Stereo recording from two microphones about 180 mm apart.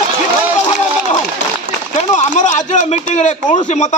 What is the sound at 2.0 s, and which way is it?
Speech, 40° left (ahead or behind).